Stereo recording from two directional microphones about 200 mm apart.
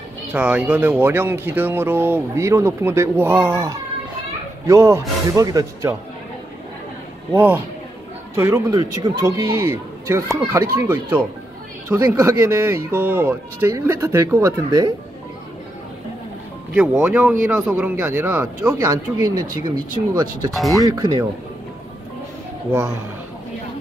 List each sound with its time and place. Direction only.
0.3 s speech: 5° right (ahead or behind)
7.3 s speech: 10° right (ahead or behind)
16.7 s speech: 5° right (ahead or behind)
20.5 s speech: centre (ahead or behind)
20.8 s speech: 15° right (ahead or behind)
22.7 s speech: 15° right (ahead or behind)